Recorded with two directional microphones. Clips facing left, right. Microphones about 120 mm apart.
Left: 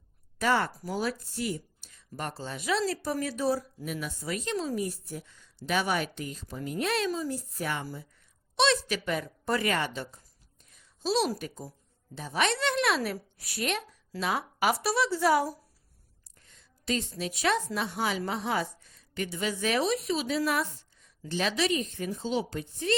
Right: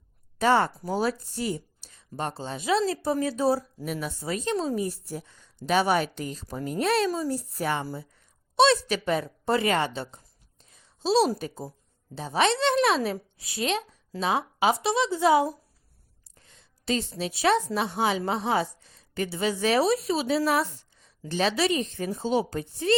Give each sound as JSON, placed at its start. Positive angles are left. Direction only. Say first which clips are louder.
{"t": 0.3, "sound": "speech", "louder": "right 5 dB", "side_deg": -30}
{"t": 10.6, "sound": "a sound", "louder": "right 3 dB", "side_deg": -30}
{"t": 12.1, "sound": "speech", "louder": "right 5 dB", "side_deg": -30}